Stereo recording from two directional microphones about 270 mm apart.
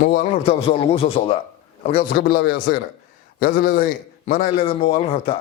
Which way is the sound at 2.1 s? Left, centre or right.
Left.